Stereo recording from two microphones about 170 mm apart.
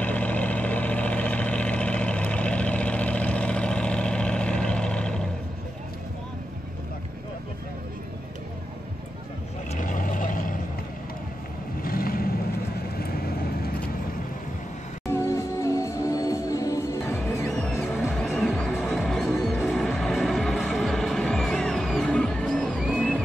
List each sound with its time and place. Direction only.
0.0 s vehicle: 10° left (ahead or behind)
9.7 s vehicle: 50° left (ahead or behind)
11.8 s vehicle: 60° left (ahead or behind)
15.0 s music: 20° left (ahead or behind)
17.4 s music: centre (ahead or behind)